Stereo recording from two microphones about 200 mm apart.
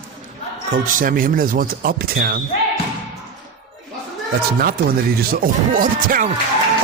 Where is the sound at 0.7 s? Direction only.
45° right (ahead or behind).